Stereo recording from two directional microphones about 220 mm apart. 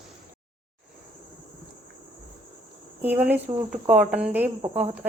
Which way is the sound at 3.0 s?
10° right (ahead or behind).